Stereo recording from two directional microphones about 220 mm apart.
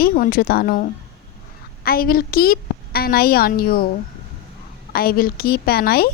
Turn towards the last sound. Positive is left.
turn(degrees=45)  # may be behind; listen again after turning